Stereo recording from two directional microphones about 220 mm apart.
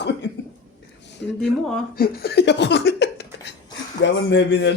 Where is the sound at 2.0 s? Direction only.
45° left (ahead or behind).